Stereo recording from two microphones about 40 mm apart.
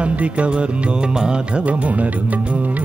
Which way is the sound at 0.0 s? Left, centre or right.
Right.